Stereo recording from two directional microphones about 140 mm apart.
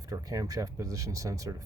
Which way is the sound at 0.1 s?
25° right (ahead or behind).